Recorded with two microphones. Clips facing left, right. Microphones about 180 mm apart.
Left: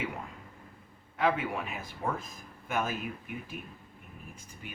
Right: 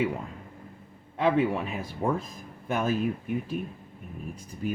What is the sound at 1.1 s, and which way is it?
Speech, 30° right (ahead or behind).